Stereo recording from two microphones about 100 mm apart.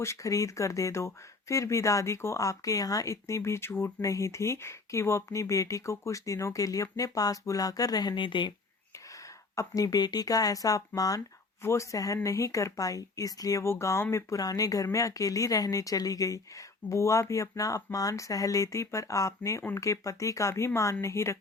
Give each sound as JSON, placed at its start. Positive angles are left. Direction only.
{"t": 0.0, "sound": "a woman's voice", "side_deg": 30}
{"t": 9.6, "sound": "a woman's voice", "side_deg": 35}